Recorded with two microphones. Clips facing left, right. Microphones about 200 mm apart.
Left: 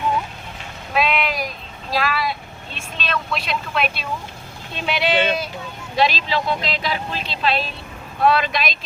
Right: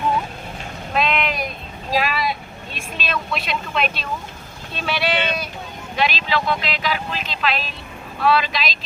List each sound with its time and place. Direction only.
0.9 s vehicle: 5° left (ahead or behind)
1.9 s vehicle: 15° right (ahead or behind)
2.7 s speech: 5° right (ahead or behind)
4.7 s speech: 20° left (ahead or behind)
6.0 s speech: 35° left (ahead or behind)
8.2 s speech: 50° left (ahead or behind)